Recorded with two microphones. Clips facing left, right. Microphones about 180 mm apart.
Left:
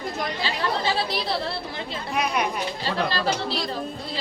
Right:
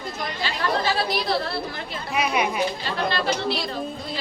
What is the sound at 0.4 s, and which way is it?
Speech, 25° left (ahead or behind).